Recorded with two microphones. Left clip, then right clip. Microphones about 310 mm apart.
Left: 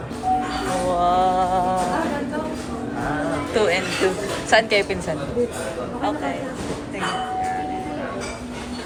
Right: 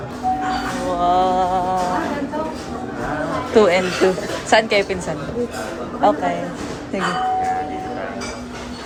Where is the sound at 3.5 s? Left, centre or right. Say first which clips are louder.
Right 6 dB; centre.